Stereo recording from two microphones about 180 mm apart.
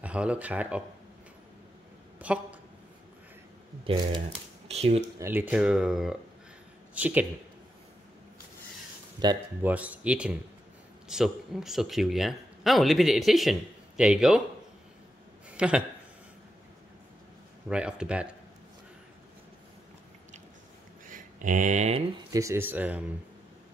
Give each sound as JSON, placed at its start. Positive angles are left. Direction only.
{"t": 0.0, "sound": "speech", "side_deg": -5}
{"t": 2.1, "sound": "a sound", "side_deg": -5}
{"t": 3.8, "sound": "speech", "side_deg": -25}
{"t": 5.2, "sound": "speech", "side_deg": -10}
{"t": 9.2, "sound": "speech", "side_deg": -25}
{"t": 9.6, "sound": "speech", "side_deg": -10}
{"t": 15.5, "sound": "speech", "side_deg": -5}
{"t": 17.6, "sound": "speech", "side_deg": -5}
{"t": 21.1, "sound": "a sound", "side_deg": -45}
{"t": 22.3, "sound": "speech", "side_deg": -15}